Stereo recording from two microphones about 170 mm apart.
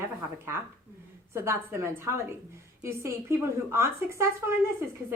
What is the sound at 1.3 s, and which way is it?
A woman's voice, 15° right (ahead or behind).